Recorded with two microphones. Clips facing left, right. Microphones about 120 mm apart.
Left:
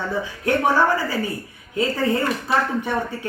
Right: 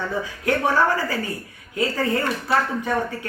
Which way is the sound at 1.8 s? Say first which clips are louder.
Left 2 dB; 20° left (ahead or behind).